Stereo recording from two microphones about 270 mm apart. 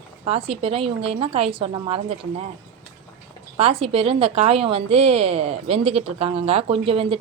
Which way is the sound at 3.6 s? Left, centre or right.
Right.